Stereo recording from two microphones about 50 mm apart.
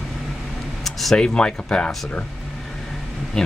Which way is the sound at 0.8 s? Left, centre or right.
Centre.